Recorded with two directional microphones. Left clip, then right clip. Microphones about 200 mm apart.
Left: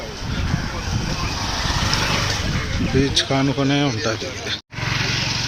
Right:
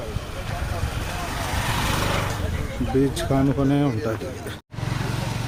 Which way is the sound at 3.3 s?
5° left (ahead or behind).